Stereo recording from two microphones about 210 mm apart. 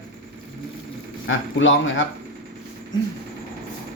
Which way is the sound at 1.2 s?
65° left (ahead or behind).